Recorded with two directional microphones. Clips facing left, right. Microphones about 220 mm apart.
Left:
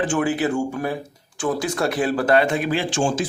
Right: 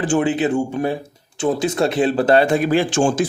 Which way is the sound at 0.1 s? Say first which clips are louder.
Right 3 dB; 25° right (ahead or behind).